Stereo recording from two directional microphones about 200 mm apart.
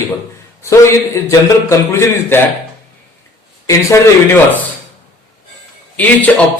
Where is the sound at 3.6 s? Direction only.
15° left (ahead or behind).